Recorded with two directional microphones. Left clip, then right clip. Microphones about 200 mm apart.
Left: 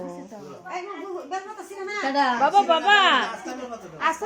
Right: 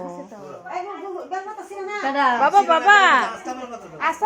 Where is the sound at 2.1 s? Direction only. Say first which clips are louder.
Right 3 dB; centre (ahead or behind).